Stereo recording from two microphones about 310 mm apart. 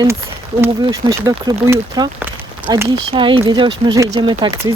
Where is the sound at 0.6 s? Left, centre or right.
Centre.